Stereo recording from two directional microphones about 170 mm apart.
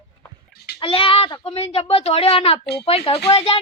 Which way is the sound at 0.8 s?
30° left (ahead or behind).